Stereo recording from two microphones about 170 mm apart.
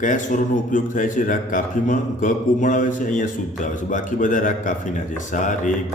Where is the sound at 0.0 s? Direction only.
50° left (ahead or behind).